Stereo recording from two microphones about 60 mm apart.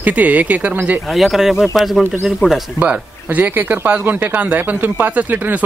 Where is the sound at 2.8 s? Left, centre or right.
Right.